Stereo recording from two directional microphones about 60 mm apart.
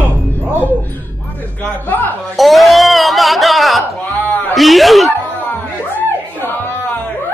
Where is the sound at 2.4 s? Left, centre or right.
Centre.